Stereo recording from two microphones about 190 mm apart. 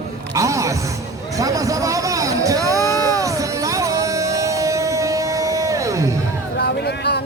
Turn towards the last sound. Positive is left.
turn(degrees=60)  # may be behind; listen again after turning